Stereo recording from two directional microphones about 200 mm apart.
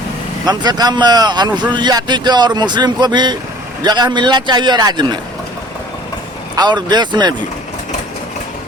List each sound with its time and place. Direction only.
0.4 s a man's voice: 20° right (ahead or behind)
6.6 s a man's voice: 20° right (ahead or behind)